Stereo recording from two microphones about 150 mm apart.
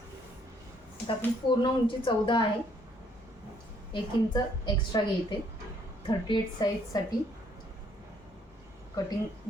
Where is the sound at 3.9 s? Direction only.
30° left (ahead or behind).